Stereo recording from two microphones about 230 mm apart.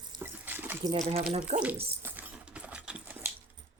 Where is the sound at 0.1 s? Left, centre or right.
Centre.